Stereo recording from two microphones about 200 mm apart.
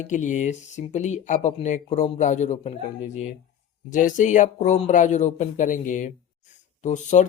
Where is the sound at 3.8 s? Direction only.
40° left (ahead or behind).